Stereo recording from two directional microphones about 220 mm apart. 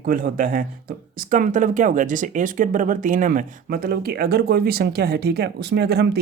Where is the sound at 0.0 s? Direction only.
40° right (ahead or behind).